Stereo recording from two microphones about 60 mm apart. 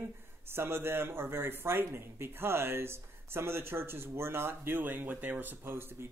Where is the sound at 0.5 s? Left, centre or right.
Right.